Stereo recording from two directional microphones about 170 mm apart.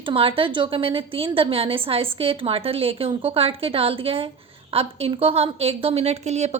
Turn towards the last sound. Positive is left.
turn(degrees=-40)  # may be behind; listen again after turning